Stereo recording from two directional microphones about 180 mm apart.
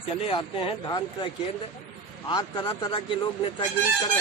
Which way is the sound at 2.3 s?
15° left (ahead or behind).